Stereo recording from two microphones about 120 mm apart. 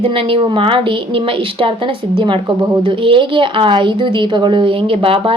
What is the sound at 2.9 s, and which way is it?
Speech, 45° right (ahead or behind).